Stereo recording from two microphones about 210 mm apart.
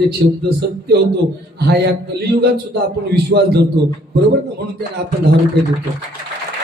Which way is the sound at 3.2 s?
50° right (ahead or behind).